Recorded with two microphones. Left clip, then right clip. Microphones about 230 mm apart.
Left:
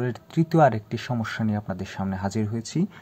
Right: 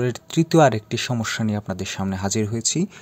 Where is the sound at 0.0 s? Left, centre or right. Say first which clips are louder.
Right 5 dB; right.